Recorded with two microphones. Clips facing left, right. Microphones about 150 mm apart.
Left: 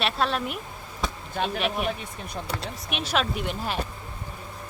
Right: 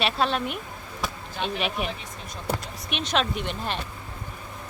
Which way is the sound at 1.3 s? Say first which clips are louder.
Left 3 dB; 45° left (ahead or behind).